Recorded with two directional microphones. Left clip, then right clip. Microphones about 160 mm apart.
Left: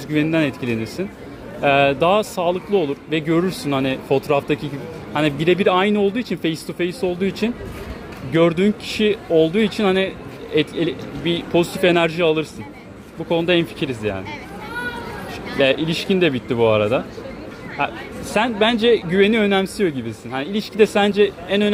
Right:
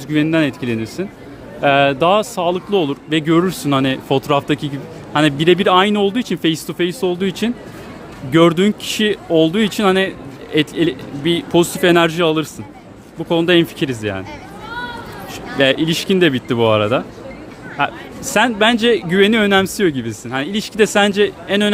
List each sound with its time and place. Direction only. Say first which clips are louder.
0.1 s speech: right 3 dB; 50° right (ahead or behind)
15.5 s speech: right 3 dB; 50° right (ahead or behind)